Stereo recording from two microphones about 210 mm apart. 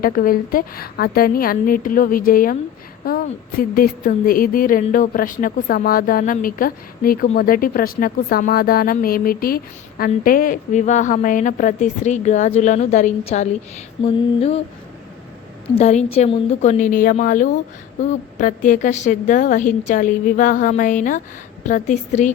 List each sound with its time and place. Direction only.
0.0 s a woman's voice: 45° left (ahead or behind)
14.0 s mantra: 30° left (ahead or behind)
15.8 s a woman's voice: 30° left (ahead or behind)